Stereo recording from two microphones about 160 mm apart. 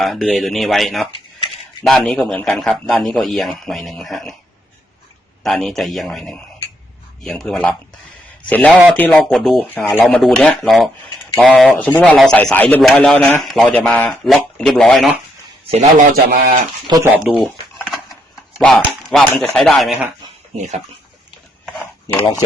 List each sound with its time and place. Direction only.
0.0 s speech: centre (ahead or behind)
5.4 s speech: centre (ahead or behind)
9.6 s speech: 10° left (ahead or behind)
10.0 s speech: centre (ahead or behind)
15.7 s a man's voice: 40° right (ahead or behind)
16.1 s speech: 75° right (ahead or behind)
17.2 s a sound: centre (ahead or behind)
18.6 s speech: 5° left (ahead or behind)
20.6 s speech: 45° right (ahead or behind)
22.1 s speech: 25° left (ahead or behind)